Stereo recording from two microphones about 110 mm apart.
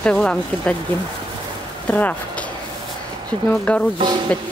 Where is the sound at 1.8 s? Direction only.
10° left (ahead or behind).